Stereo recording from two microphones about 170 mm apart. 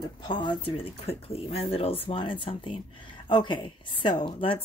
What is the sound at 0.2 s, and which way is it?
A woman's voice, 25° left (ahead or behind).